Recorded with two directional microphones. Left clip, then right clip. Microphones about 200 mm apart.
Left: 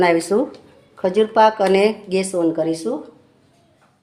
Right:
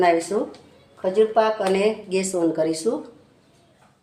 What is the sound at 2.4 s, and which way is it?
Speech, 10° left (ahead or behind).